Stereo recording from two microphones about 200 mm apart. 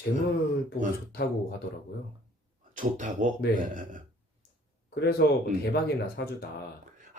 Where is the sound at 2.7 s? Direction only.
40° right (ahead or behind).